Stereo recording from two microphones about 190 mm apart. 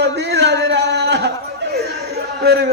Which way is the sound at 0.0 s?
60° right (ahead or behind).